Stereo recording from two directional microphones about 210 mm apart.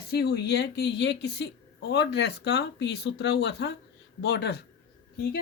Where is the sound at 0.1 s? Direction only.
50° left (ahead or behind).